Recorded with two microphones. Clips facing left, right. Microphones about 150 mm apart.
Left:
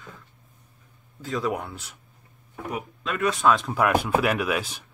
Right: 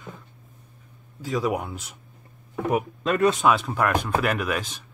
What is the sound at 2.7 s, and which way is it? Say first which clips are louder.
Speech: right 7 dB; 40° right (ahead or behind).